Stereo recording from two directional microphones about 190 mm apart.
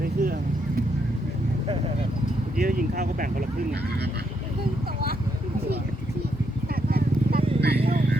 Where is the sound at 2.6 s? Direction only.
45° right (ahead or behind).